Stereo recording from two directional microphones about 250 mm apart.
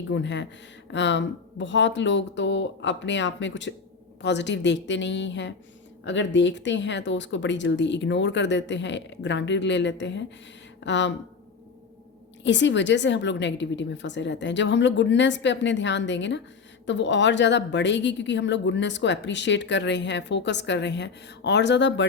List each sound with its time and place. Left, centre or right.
0.1 s a woman's voice: left
12.4 s a woman's voice: left